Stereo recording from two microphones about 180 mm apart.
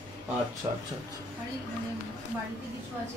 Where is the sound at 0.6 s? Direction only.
20° right (ahead or behind).